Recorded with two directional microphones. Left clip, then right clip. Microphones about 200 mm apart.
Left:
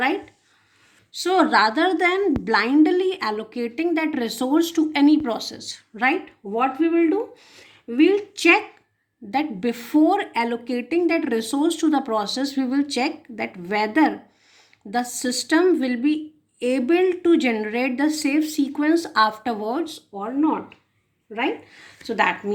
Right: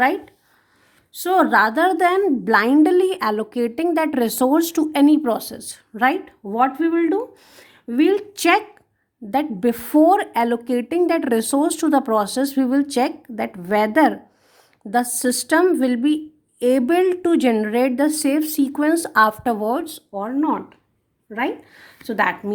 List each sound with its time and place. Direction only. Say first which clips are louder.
1.1 s a woman's voice: right 2 dB; 50° right (ahead or behind)